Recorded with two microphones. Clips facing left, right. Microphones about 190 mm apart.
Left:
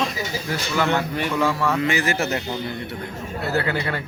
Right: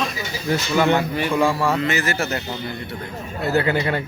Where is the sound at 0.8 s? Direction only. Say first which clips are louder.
Right 3 dB; 15° right (ahead or behind).